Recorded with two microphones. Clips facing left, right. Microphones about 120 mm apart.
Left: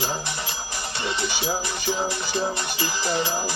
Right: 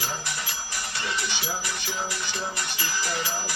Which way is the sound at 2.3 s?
25° left (ahead or behind).